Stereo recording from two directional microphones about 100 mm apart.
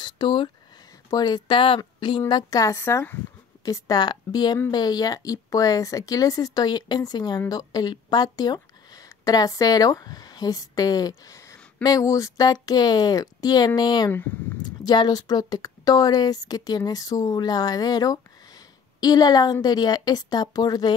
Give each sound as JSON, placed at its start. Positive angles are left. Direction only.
{"t": 0.0, "sound": "a sound", "side_deg": 50}
{"t": 1.1, "sound": "a woman's voice", "side_deg": 45}
{"t": 2.0, "sound": "a woman's voice", "side_deg": 55}
{"t": 2.6, "sound": "a woman's voice", "side_deg": 30}
{"t": 3.6, "sound": "a woman's voice", "side_deg": 35}